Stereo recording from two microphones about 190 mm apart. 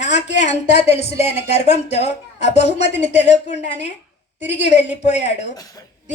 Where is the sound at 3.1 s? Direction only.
35° left (ahead or behind).